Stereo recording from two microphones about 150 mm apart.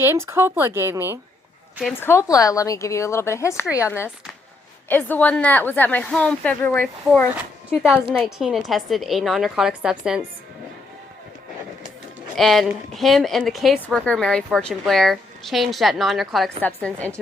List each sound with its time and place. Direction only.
0.0 s speech: 15° right (ahead or behind)
2.0 s a woman's voice: 15° left (ahead or behind)
7.8 s a woman's voice: 5° right (ahead or behind)
12.4 s a woman's voice: centre (ahead or behind)
16.6 s a woman's voice: 10° left (ahead or behind)